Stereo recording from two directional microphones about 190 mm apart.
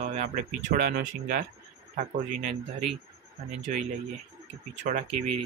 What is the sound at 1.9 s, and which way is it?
Speech, 35° right (ahead or behind).